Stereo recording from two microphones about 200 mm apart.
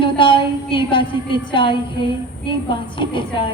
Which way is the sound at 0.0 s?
25° left (ahead or behind).